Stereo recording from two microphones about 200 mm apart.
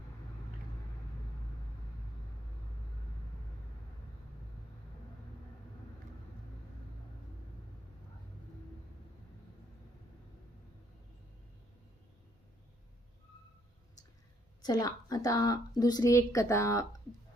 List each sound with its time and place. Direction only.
14.6 s a woman's voice: 20° left (ahead or behind)